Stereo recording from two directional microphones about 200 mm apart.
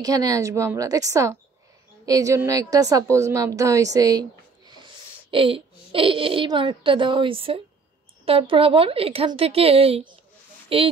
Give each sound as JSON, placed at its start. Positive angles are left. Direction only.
{"t": 0.0, "sound": "a woman's voice", "side_deg": -20}